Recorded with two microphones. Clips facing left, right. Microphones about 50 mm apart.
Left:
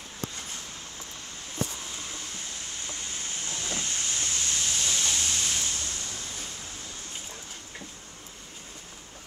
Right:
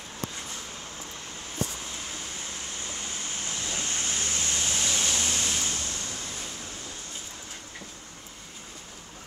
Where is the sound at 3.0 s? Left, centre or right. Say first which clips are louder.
Right 1 dB; right.